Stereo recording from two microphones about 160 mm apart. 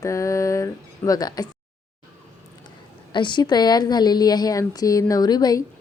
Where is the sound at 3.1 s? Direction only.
30° left (ahead or behind).